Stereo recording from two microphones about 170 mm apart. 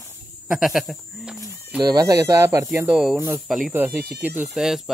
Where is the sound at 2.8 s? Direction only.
Centre (ahead or behind).